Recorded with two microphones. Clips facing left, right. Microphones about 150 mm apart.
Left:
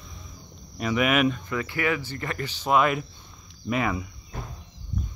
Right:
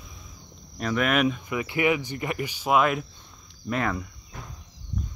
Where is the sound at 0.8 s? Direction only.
5° left (ahead or behind).